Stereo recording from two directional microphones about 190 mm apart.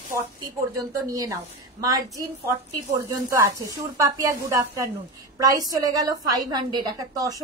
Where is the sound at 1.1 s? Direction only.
20° right (ahead or behind).